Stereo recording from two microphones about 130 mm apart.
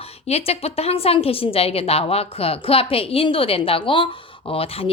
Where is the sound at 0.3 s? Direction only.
50° left (ahead or behind).